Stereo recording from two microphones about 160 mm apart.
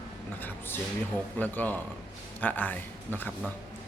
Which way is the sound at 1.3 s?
10° left (ahead or behind).